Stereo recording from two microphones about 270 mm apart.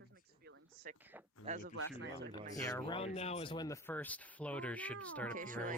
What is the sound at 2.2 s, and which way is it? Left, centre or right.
Speech, right.